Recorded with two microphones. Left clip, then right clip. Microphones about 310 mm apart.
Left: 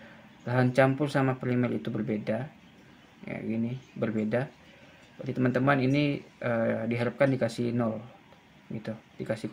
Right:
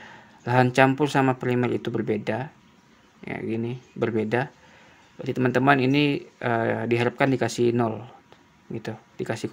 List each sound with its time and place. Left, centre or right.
0.5 s speech: right